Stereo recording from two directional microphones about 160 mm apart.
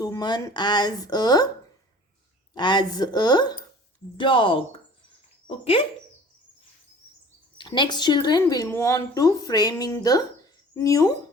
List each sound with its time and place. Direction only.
0.0 s speech: 25° left (ahead or behind)
2.6 s speech: 25° left (ahead or behind)
7.6 s speech: 30° left (ahead or behind)